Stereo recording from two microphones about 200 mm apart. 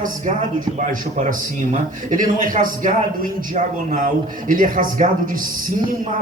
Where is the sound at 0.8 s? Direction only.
35° right (ahead or behind).